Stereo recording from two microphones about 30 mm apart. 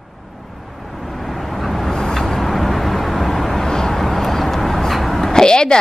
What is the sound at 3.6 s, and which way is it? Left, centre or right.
Vehicle, centre.